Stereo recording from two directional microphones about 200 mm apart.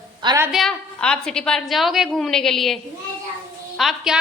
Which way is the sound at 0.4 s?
Centre (ahead or behind).